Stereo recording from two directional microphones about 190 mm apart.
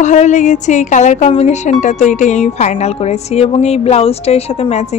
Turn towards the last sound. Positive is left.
turn(degrees=35)  # may be behind; listen again after turning